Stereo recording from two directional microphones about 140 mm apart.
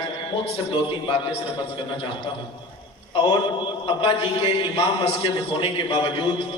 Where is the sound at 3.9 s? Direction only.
40° left (ahead or behind).